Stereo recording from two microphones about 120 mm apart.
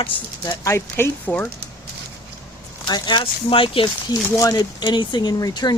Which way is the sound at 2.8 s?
40° left (ahead or behind).